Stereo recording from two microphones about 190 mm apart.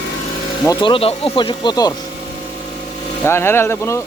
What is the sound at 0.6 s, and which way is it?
Speech, 20° left (ahead or behind).